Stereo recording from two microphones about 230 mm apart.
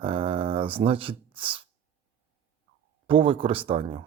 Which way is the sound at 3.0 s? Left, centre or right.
Right.